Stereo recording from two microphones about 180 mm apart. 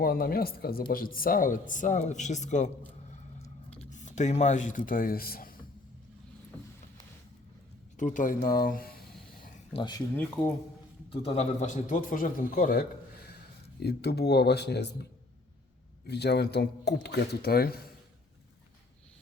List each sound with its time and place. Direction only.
0.0 s speech: 55° left (ahead or behind)
3.1 s a sound: 40° left (ahead or behind)
3.8 s a man's voice: 40° left (ahead or behind)
7.9 s speech: 45° left (ahead or behind)
11.1 s speech: 35° left (ahead or behind); by 12.8 s 55° left (ahead or behind)
13.7 s speech: 65° left (ahead or behind)
16.0 s speech: 65° left (ahead or behind)